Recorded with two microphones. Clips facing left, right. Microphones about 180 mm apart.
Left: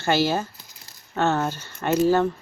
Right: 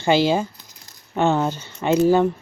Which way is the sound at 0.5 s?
5° left (ahead or behind).